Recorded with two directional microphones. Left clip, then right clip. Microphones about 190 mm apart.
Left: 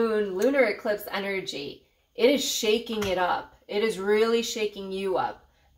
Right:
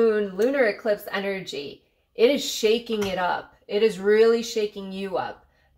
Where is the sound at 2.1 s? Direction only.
35° right (ahead or behind).